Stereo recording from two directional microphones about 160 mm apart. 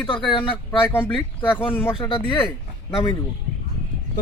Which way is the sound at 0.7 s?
10° left (ahead or behind).